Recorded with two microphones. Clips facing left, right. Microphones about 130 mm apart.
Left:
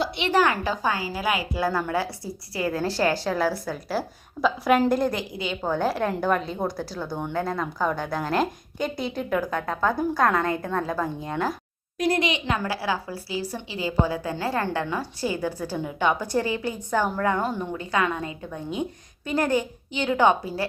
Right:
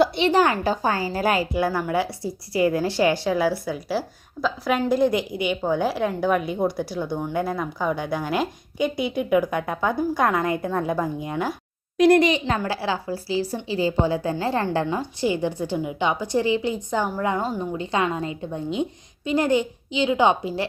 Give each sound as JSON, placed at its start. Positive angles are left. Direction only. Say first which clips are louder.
{"t": 0.2, "sound": "a woman's voice", "louder": "right 3 dB", "side_deg": -30}
{"t": 1.5, "sound": "a woman's voice", "louder": "right 2 dB", "side_deg": -10}
{"t": 2.9, "sound": "a woman's voice", "louder": "right 3 dB", "side_deg": -10}
{"t": 5.1, "sound": "a woman's voice", "louder": "right 6 dB", "side_deg": -15}
{"t": 11.9, "sound": "speech", "louder": "right 8 dB", "side_deg": -75}
{"t": 12.2, "sound": "a woman's voice", "louder": "right 4 dB", "side_deg": -35}